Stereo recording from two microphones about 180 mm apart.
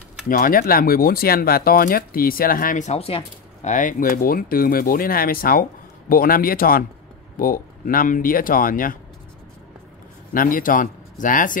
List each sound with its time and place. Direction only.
0.3 s speech: 50° left (ahead or behind); by 3.7 s 35° left (ahead or behind)
3.7 s speech: 50° left (ahead or behind)
10.3 s speech: 50° left (ahead or behind)